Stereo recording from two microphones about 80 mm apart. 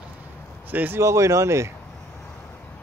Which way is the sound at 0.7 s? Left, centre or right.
Right.